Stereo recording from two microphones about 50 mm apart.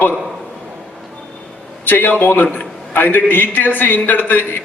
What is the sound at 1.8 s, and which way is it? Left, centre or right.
A man's voice, left.